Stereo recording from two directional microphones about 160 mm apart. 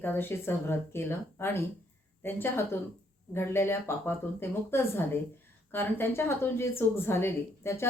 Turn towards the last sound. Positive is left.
turn(degrees=15)  # may be behind; listen again after turning